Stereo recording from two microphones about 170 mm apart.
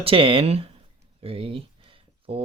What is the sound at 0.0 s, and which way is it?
Speech, 30° right (ahead or behind).